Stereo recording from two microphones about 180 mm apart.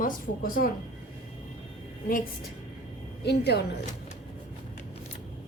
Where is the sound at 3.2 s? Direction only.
65° left (ahead or behind).